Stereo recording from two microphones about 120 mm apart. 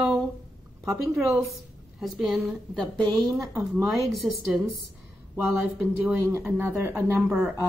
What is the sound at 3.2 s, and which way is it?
Speech, 30° right (ahead or behind).